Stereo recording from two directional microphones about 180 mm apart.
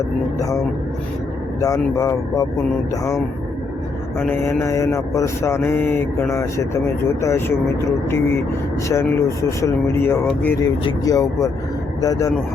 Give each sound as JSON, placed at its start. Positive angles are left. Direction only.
{"t": 0.3, "sound": "speech", "side_deg": 20}
{"t": 1.6, "sound": "speech", "side_deg": 20}
{"t": 4.2, "sound": "mantra", "side_deg": 15}
{"t": 10.6, "sound": "speech", "side_deg": 20}